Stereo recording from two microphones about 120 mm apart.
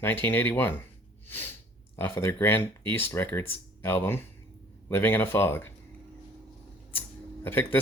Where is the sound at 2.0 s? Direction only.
20° left (ahead or behind).